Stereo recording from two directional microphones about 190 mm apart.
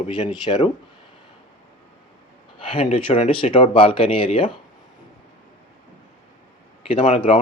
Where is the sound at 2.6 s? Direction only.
30° left (ahead or behind).